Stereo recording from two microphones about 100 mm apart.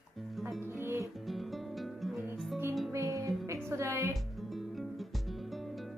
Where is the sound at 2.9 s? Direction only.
30° right (ahead or behind).